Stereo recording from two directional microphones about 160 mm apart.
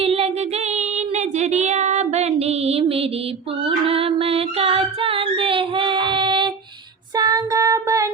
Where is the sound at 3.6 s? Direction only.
35° right (ahead or behind).